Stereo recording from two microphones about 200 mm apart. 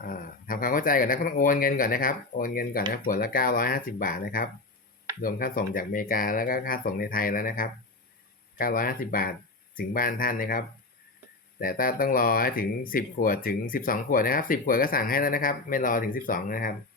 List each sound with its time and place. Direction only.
0.0 s speech: 45° left (ahead or behind)